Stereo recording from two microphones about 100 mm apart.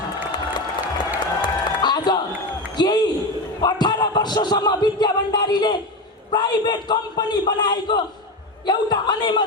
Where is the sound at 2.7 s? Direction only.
45° left (ahead or behind).